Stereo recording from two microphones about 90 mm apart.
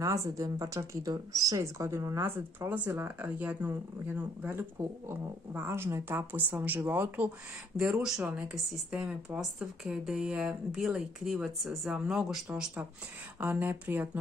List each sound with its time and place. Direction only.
0.0 s speech: 40° right (ahead or behind)
7.7 s speech: 5° right (ahead or behind)
8.2 s speech: 20° right (ahead or behind)
8.5 s speech: 10° right (ahead or behind)
13.4 s speech: 20° right (ahead or behind)